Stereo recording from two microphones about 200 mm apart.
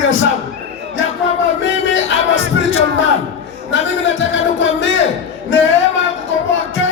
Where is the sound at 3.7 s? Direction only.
70° left (ahead or behind).